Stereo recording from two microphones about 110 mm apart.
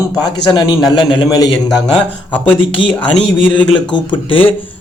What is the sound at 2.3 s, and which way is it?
Speech, 10° left (ahead or behind).